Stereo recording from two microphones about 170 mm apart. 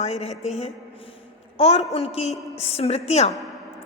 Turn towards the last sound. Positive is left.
turn(degrees=40)  # may be behind; listen again after turning